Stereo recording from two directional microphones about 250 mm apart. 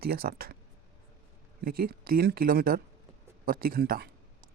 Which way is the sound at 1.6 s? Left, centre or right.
Right.